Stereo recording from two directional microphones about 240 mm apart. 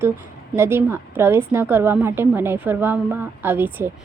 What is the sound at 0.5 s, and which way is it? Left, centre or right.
A woman's voice, centre.